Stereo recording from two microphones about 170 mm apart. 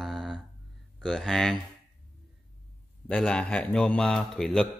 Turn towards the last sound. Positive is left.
turn(degrees=5)  # may be behind; listen again after turning